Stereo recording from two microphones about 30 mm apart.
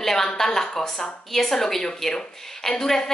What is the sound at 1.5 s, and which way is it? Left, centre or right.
A woman's voice, centre.